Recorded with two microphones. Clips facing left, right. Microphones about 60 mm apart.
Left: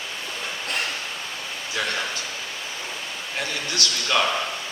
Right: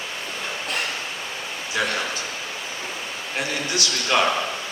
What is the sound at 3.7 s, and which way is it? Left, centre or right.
Speech, centre.